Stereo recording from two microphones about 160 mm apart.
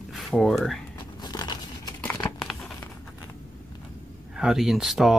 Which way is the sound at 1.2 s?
25° left (ahead or behind).